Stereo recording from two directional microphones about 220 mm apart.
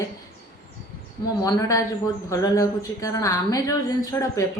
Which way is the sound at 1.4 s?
15° left (ahead or behind).